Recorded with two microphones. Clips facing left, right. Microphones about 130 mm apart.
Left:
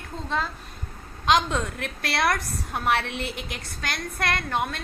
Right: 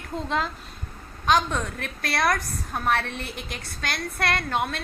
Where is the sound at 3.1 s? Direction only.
60° left (ahead or behind).